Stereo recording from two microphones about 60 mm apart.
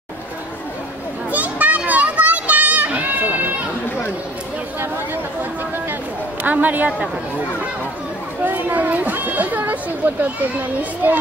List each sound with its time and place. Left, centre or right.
1.3 s children playing: right
6.4 s speech: right
8.5 s a sound: right
10.8 s speech: right